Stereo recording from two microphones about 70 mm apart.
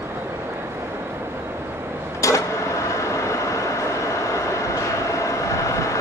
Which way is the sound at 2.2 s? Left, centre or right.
Left.